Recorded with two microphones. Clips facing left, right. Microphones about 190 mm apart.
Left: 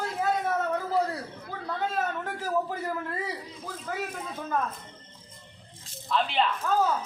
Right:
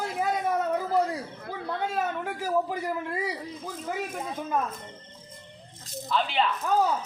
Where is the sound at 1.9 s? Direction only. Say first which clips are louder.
Right 1 dB; 10° right (ahead or behind).